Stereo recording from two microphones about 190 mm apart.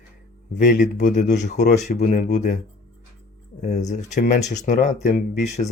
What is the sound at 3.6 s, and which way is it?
Speech, 40° left (ahead or behind).